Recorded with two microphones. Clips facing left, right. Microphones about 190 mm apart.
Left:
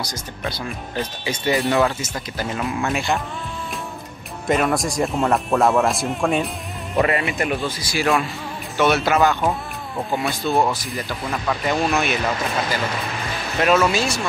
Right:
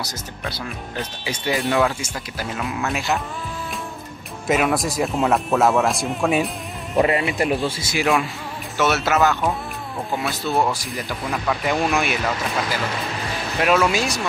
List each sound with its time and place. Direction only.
0.0 s speech: 5° right (ahead or behind)
4.5 s speech: 5° right (ahead or behind)
7.0 s speech: 20° right (ahead or behind)
7.3 s speech: 30° right (ahead or behind)
8.7 s speech: 5° right (ahead or behind)
13.6 s speech: 10° right (ahead or behind)